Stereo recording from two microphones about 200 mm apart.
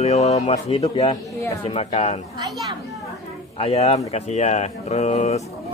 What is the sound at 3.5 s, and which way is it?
Speech, 30° left (ahead or behind).